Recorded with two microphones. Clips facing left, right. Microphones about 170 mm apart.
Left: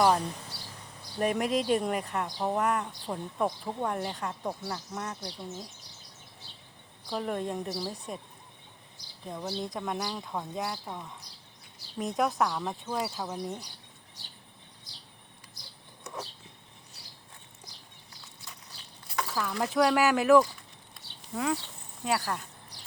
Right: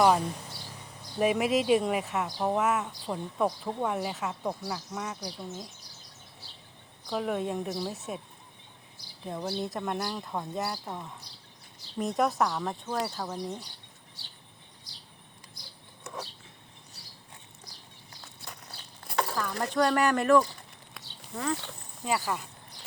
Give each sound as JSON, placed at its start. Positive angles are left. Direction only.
{"t": 0.0, "sound": "speech", "side_deg": -10}
{"t": 7.1, "sound": "speech", "side_deg": -5}
{"t": 9.2, "sound": "speech", "side_deg": -10}
{"t": 19.0, "sound": "a sound", "side_deg": -55}
{"t": 19.4, "sound": "speech", "side_deg": 5}